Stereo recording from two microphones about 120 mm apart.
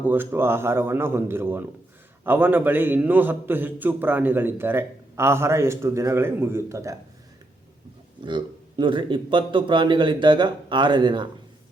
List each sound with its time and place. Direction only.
0.0 s a man's voice: 15° right (ahead or behind)
8.2 s a man's voice: 40° right (ahead or behind)